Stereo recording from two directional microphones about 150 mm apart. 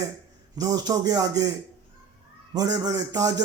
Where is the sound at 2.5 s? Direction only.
25° right (ahead or behind).